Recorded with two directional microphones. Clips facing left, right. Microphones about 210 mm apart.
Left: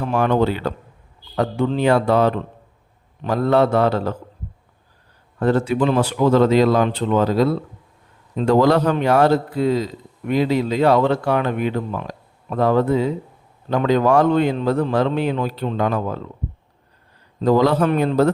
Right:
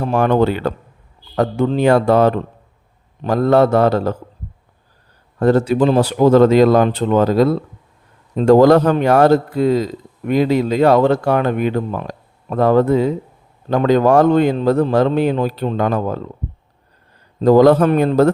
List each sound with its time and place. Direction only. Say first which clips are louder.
0.0 s speech: right 3 dB; 45° right (ahead or behind)
5.4 s speech: right 4 dB; 40° right (ahead or behind)
17.4 s speech: right 6 dB; 45° right (ahead or behind)